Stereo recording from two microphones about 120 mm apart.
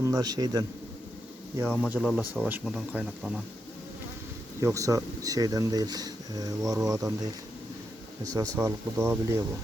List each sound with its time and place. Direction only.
0.0 s speech: 30° right (ahead or behind)
1.6 s speech: 10° left (ahead or behind)
2.0 s speech: centre (ahead or behind)
4.6 s speech: 30° right (ahead or behind)
8.2 s speech: 30° right (ahead or behind)